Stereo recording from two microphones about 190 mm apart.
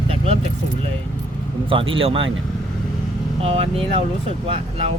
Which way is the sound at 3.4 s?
30° right (ahead or behind).